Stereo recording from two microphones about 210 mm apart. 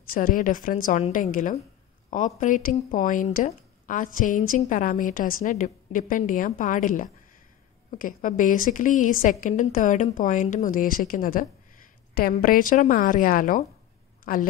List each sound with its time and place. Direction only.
0.1 s a woman's voice: 40° left (ahead or behind)